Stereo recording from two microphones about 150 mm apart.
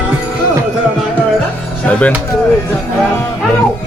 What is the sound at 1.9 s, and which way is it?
Speech, 10° left (ahead or behind).